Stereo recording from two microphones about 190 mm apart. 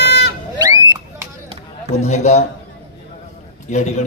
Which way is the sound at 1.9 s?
35° left (ahead or behind).